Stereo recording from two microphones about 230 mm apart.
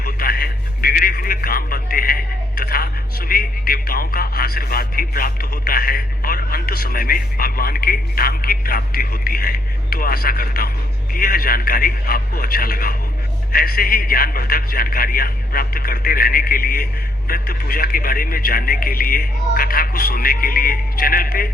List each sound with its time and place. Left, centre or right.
0.0 s a man's voice: left